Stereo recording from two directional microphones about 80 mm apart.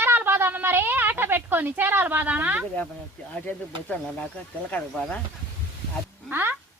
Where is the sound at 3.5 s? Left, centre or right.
Left.